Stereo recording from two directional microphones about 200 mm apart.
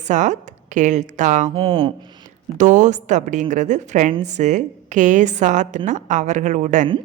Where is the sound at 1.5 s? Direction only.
25° right (ahead or behind).